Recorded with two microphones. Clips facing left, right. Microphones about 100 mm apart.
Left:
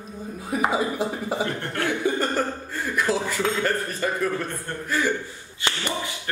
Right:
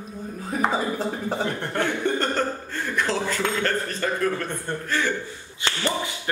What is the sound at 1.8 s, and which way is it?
Speech, 5° left (ahead or behind).